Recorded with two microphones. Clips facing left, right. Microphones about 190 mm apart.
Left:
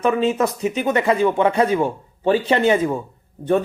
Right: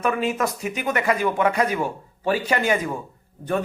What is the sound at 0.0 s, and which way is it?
Speech, 20° left (ahead or behind).